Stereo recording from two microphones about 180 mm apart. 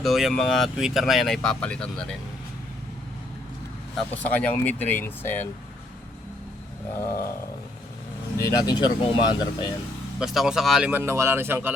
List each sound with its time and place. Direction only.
0.0 s speech: centre (ahead or behind)
3.9 s speech: 10° left (ahead or behind)
8.4 s speech: 20° left (ahead or behind)
10.2 s speech: centre (ahead or behind)